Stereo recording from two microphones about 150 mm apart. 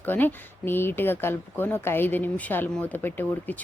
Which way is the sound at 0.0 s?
10° left (ahead or behind).